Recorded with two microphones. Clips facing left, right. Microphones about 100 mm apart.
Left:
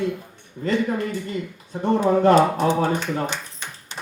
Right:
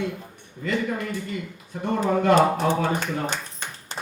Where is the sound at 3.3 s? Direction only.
45° right (ahead or behind).